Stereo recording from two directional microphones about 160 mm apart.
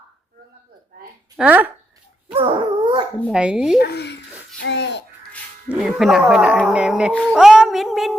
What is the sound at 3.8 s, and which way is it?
Speech, 90° left.